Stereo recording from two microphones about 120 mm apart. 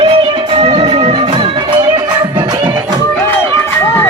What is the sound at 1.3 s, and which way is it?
Music, 40° right (ahead or behind).